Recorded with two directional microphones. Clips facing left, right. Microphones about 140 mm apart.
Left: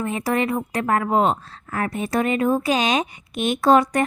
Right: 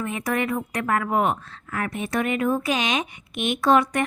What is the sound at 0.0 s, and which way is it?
A woman's voice, 30° left (ahead or behind).